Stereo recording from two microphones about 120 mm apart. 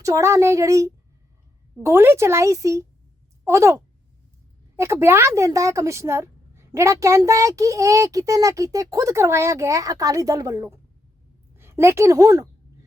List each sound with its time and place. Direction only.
0.0 s a woman's voice: 25° right (ahead or behind)